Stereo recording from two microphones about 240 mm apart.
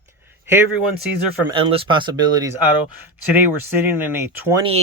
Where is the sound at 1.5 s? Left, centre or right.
Right.